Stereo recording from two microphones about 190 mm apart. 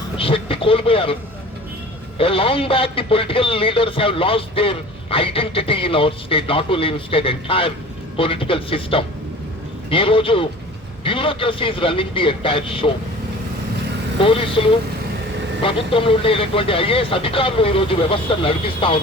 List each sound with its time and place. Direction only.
0.2 s speech: 30° left (ahead or behind)
2.1 s speech: 30° left (ahead or behind)
14.2 s speech: 30° left (ahead or behind)